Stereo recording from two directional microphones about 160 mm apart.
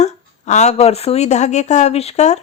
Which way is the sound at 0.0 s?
45° left (ahead or behind).